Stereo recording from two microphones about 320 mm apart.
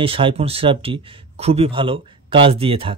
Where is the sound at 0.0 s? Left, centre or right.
Centre.